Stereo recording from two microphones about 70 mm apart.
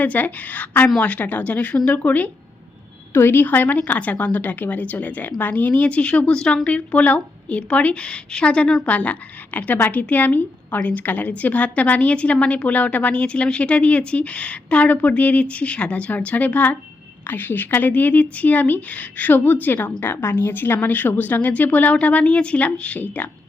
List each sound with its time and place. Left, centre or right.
0.0 s a woman's voice: left